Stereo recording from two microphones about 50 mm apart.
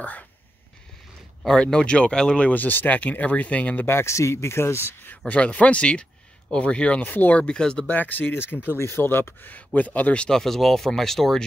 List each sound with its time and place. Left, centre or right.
1.6 s speech: centre
2.3 s speech: left
3.8 s speech: left
5.3 s speech: left
7.0 s speech: left
7.4 s speech: centre
7.8 s speech: left
8.7 s speech: left
9.8 s speech: left
10.2 s speech: centre